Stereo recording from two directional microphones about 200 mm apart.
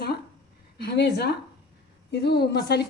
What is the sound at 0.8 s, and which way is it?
A woman's voice, 55° left (ahead or behind).